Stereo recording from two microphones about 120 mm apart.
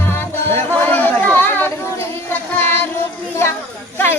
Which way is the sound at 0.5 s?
15° left (ahead or behind).